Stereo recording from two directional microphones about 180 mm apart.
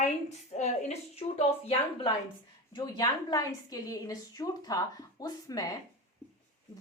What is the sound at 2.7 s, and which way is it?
A woman's voice, 20° left (ahead or behind).